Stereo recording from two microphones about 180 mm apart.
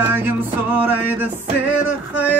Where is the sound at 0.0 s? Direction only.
10° right (ahead or behind).